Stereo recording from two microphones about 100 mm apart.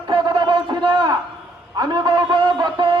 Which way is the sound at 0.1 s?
50° right (ahead or behind).